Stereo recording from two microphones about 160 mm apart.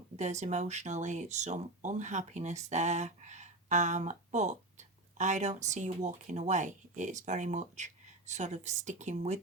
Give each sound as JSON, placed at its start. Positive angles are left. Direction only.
{"t": 0.2, "sound": "speech", "side_deg": -45}